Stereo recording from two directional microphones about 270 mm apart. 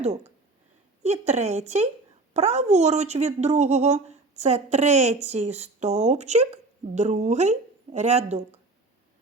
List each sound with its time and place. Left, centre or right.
0.0 s speech: right